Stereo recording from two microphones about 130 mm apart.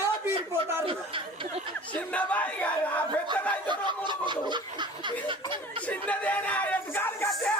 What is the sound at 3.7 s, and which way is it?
Snicker, 35° right (ahead or behind).